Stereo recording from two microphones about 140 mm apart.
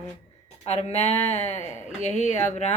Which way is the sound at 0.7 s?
50° left (ahead or behind).